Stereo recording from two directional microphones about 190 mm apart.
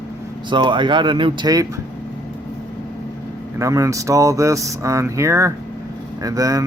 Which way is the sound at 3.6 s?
15° right (ahead or behind).